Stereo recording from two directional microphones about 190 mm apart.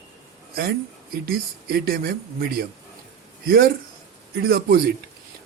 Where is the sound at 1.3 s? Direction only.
50° right (ahead or behind).